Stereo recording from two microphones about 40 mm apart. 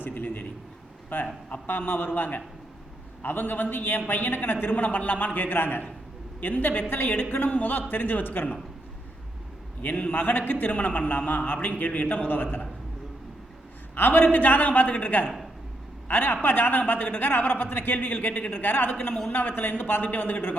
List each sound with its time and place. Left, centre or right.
0.0 s a man's voice: left
4.7 s a man's voice: left
9.9 s a man's voice: left
10.7 s a man's voice: left
12.4 s a man's voice: left
13.9 s a man's voice: left